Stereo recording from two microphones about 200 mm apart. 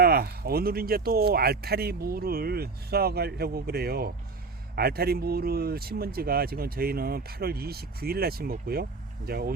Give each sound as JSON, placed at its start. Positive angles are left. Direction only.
{"t": 0.0, "sound": "speech", "side_deg": -50}